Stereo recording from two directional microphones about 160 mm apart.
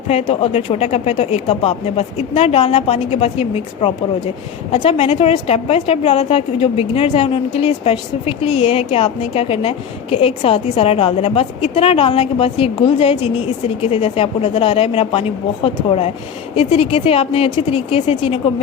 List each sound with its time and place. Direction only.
0.1 s a woman's voice: 40° left (ahead or behind)